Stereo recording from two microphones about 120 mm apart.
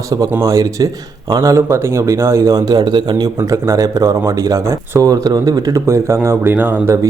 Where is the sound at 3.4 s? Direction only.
25° right (ahead or behind).